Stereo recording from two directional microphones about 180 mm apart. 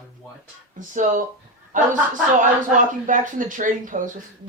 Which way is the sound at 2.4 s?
45° right (ahead or behind).